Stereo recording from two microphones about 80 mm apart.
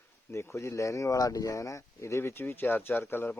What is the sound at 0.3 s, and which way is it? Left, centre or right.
Speech, left.